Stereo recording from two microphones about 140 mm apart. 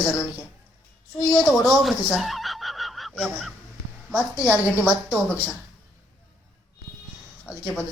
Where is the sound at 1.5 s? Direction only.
Centre (ahead or behind).